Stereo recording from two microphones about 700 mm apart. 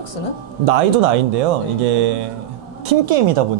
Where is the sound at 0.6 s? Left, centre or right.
Right.